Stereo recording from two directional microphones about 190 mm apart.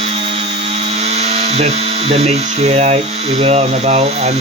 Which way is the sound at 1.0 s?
35° right (ahead or behind).